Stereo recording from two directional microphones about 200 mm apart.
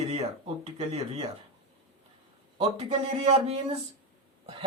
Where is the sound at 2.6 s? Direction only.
30° right (ahead or behind).